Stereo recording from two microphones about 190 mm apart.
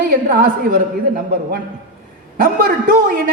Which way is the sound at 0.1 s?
50° right (ahead or behind).